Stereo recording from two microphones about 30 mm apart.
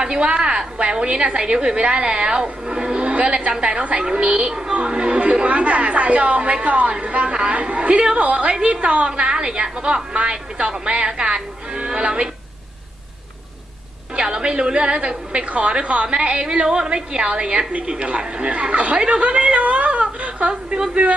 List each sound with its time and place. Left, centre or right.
0.0 s a woman's voice: right
5.5 s a woman's voice: right
7.3 s a woman's voice: right
14.2 s a woman's voice: right
20.5 s a woman's voice: right
20.9 s a woman's voice: right